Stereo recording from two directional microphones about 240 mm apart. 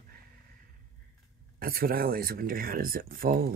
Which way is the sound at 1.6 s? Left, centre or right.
Right.